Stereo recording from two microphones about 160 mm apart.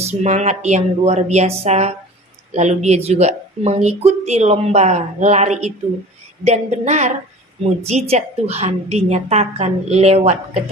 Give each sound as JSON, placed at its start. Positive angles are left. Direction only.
{"t": 0.0, "sound": "speech", "side_deg": -45}